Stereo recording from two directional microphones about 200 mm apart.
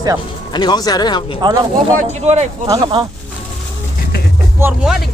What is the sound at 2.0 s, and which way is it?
Speech, 35° right (ahead or behind).